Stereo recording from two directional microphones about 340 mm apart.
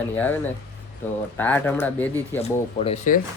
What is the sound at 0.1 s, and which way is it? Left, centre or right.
Speech, centre.